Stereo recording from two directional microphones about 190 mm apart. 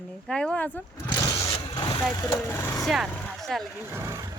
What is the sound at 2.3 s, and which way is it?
Speech, 10° left (ahead or behind).